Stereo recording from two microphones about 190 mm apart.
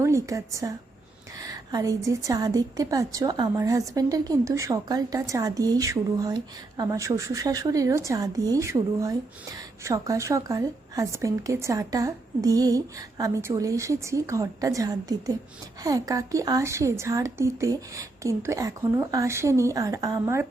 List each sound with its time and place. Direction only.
0.0 s a woman's voice: 15° right (ahead or behind)